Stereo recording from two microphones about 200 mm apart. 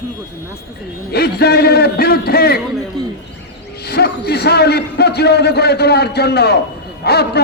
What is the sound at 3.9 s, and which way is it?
A man's voice, 55° left (ahead or behind).